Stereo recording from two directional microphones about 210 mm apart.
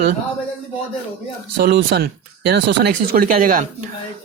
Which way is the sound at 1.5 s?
45° right (ahead or behind).